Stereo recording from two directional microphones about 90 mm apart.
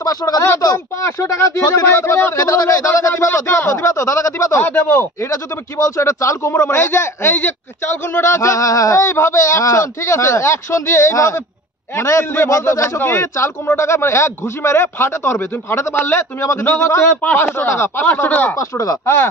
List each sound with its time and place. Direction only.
0.0 s speech: 40° left (ahead or behind)
4.6 s speech: 20° left (ahead or behind)
8.2 s speech: 35° left (ahead or behind)
18.6 s speech: 40° left (ahead or behind)